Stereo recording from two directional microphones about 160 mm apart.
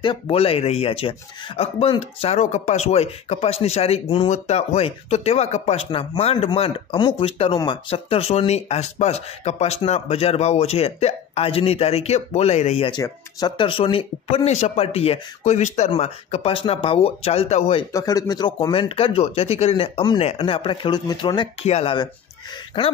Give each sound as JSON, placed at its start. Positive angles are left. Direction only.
{"t": 0.0, "sound": "speech", "side_deg": 35}
{"t": 17.9, "sound": "speech", "side_deg": 20}
{"t": 21.6, "sound": "speech", "side_deg": 40}